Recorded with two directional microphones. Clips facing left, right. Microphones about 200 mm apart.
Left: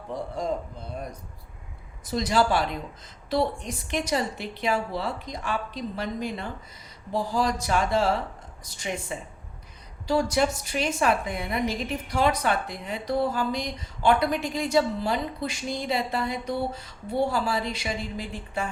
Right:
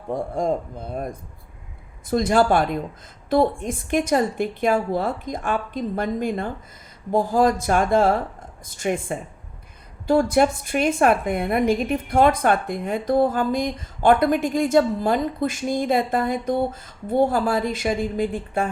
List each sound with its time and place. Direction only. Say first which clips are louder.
0.1 s a woman's voice: right 6 dB; 50° right (ahead or behind)